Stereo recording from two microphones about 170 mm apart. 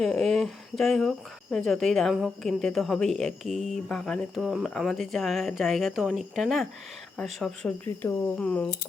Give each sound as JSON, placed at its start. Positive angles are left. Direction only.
{"t": 0.0, "sound": "speech", "side_deg": 0}
{"t": 7.9, "sound": "speech", "side_deg": 15}
{"t": 8.4, "sound": "speech", "side_deg": 5}